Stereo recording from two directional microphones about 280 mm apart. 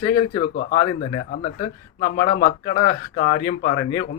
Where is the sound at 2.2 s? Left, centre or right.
Left.